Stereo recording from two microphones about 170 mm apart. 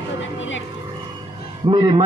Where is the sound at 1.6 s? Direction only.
25° right (ahead or behind).